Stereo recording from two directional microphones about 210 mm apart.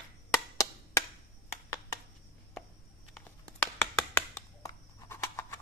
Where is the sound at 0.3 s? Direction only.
15° left (ahead or behind).